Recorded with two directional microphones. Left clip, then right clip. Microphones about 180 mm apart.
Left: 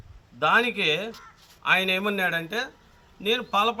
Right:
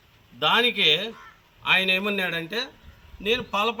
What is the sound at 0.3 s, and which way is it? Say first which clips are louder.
A man's voice: right 1 dB; 5° left (ahead or behind).